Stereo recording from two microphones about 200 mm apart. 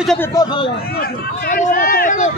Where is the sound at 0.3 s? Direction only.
20° left (ahead or behind).